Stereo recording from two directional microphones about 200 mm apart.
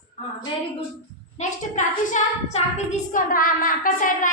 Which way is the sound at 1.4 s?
35° left (ahead or behind).